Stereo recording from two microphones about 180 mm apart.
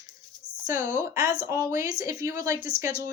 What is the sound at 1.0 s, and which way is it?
A woman's voice, 15° right (ahead or behind).